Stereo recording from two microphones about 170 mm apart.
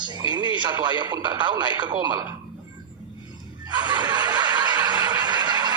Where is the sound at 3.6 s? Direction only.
25° right (ahead or behind).